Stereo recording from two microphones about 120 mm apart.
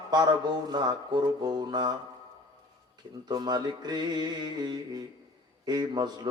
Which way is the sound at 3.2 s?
35° right (ahead or behind).